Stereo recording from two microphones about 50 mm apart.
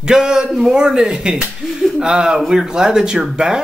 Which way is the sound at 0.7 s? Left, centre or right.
Centre.